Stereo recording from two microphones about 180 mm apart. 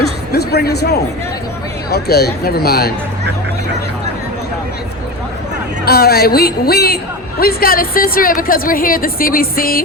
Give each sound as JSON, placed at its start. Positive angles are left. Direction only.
{"t": 0.0, "sound": "a sound", "side_deg": 65}
{"t": 1.9, "sound": "speech", "side_deg": 65}
{"t": 5.8, "sound": "a woman's voice", "side_deg": 60}